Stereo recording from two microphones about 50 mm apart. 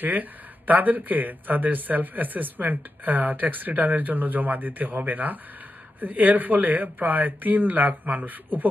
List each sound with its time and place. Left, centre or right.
0.0 s a man's voice: right